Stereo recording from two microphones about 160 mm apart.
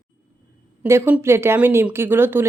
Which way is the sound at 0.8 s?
15° right (ahead or behind).